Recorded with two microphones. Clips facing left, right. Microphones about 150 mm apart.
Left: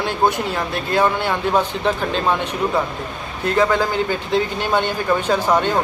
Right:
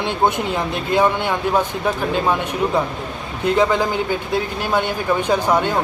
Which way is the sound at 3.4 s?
15° right (ahead or behind).